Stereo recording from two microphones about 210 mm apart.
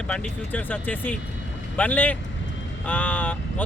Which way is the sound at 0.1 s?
5° left (ahead or behind).